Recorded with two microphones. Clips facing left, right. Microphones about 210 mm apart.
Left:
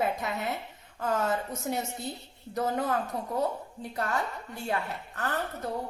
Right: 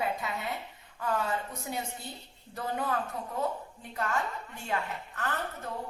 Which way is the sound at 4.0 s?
35° left (ahead or behind).